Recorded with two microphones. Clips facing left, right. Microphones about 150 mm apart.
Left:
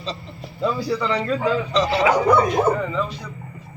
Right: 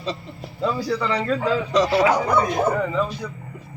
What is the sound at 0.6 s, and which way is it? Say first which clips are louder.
Speech: left 1 dB; centre (ahead or behind).